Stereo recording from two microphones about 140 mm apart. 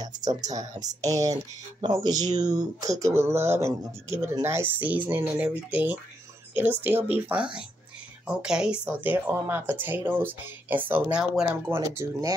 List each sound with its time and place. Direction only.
0.0 s speech: 25° right (ahead or behind); by 8.8 s 5° right (ahead or behind)
8.8 s speech: 15° right (ahead or behind)
11.7 s speech: 15° right (ahead or behind)